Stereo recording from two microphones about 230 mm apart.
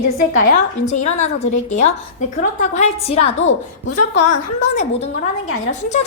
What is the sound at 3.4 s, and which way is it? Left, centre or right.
Speech, left.